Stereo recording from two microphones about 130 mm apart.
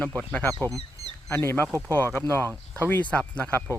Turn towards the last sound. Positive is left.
turn(degrees=10)  # may be behind; listen again after turning